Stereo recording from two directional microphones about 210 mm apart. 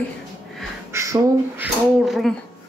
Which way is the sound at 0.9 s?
15° right (ahead or behind).